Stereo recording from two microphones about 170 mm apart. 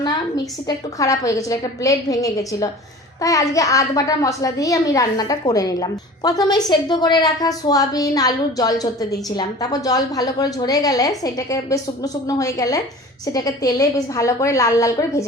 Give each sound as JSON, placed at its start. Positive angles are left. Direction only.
{"t": 0.7, "sound": "a woman's voice", "side_deg": 20}